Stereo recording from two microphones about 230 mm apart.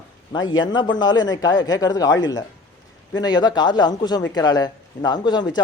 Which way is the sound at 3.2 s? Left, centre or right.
Centre.